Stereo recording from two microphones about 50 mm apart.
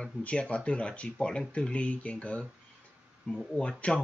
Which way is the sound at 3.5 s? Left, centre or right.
Centre.